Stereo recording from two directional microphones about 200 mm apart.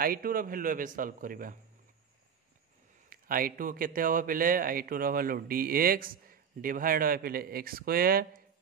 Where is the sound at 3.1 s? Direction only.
45° right (ahead or behind).